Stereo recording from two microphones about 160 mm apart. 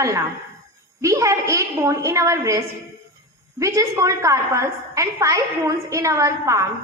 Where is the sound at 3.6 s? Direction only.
20° right (ahead or behind).